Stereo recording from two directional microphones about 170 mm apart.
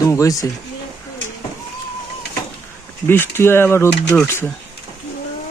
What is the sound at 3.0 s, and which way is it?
Speech, 10° left (ahead or behind).